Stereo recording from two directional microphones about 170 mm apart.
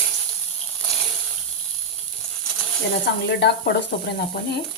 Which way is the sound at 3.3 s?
75° left (ahead or behind).